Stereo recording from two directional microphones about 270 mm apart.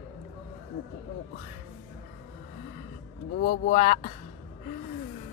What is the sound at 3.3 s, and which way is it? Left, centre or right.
Speech, left.